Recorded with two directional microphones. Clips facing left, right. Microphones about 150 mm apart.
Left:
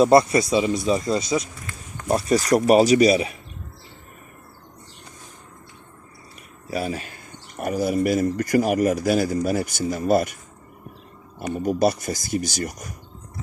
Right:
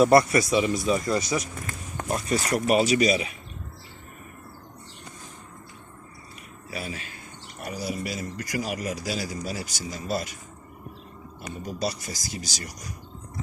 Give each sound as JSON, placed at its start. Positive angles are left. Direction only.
{"t": 0.0, "sound": "speech", "side_deg": 25}
{"t": 2.0, "sound": "speech", "side_deg": 35}
{"t": 6.7, "sound": "speech", "side_deg": 40}
{"t": 11.3, "sound": "speech", "side_deg": 55}